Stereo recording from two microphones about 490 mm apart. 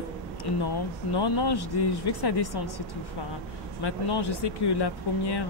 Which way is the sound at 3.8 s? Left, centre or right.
Left.